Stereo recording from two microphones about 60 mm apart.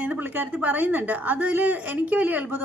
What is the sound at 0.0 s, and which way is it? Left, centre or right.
A woman's voice, right.